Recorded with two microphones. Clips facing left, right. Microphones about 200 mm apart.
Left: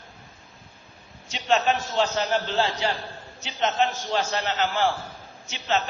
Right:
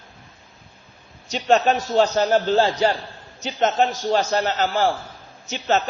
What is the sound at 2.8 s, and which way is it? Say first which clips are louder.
Speech: right 7 dB; 45° right (ahead or behind).